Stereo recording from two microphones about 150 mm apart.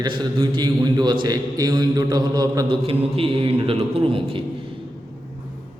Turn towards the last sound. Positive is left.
turn(degrees=-35)  # may be behind; listen again after turning